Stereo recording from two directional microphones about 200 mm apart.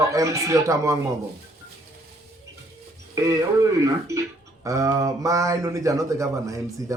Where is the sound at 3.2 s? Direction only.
15° right (ahead or behind).